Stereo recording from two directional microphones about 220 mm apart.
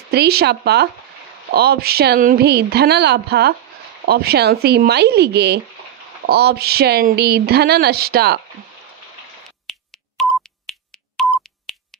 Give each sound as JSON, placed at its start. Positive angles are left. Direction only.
{"t": 0.1, "sound": "speech", "side_deg": -45}
{"t": 9.7, "sound": "telephone dialing", "side_deg": 0}
{"t": 10.7, "sound": "finger snapping", "side_deg": 0}